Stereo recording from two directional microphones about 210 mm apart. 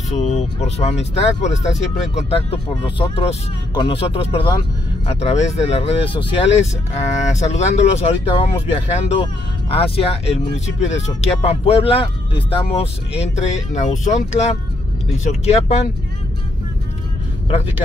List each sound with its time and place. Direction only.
0.1 s speech: 30° left (ahead or behind)
17.5 s speech: 25° left (ahead or behind)